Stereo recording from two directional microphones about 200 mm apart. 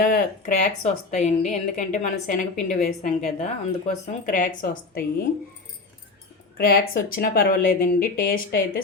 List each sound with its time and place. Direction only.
0.4 s a woman's voice: 40° left (ahead or behind)
6.6 s speech: 45° left (ahead or behind)